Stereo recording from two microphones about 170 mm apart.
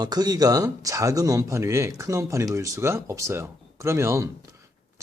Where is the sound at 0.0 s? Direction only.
25° right (ahead or behind).